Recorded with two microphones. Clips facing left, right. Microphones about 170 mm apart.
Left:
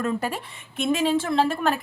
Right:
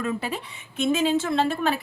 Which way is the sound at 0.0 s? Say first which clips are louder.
Left 2 dB; 50° left (ahead or behind).